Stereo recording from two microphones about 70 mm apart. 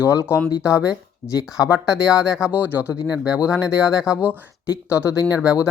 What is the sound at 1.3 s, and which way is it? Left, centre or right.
Speech, left.